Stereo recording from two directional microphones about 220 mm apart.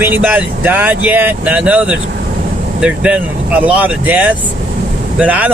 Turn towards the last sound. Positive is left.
turn(degrees=-5)  # may be behind; listen again after turning